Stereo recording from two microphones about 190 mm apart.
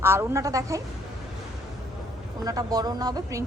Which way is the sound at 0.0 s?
15° right (ahead or behind).